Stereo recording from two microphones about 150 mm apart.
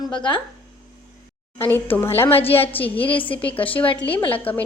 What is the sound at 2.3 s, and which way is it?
A woman's voice, 40° left (ahead or behind).